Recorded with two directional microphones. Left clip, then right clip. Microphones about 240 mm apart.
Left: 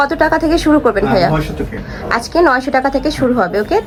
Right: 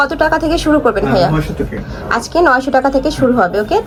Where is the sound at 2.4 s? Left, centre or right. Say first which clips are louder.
Right 1 dB; centre.